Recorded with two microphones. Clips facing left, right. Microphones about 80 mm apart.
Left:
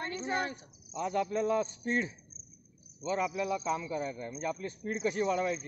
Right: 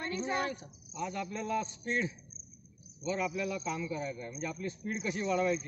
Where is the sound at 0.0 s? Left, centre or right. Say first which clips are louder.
Even; left.